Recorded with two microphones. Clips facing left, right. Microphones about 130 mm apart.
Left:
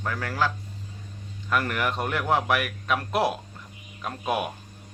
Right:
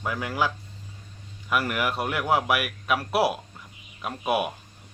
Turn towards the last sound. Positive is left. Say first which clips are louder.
# right 2 dB
turn(degrees=-10)  # may be behind; listen again after turning